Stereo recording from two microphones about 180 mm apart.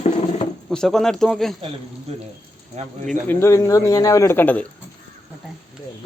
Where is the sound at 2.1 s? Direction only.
35° right (ahead or behind).